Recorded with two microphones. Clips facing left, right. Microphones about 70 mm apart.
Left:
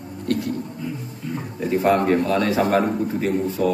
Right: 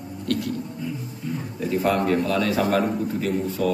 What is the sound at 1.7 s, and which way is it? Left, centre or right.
A man's voice, left.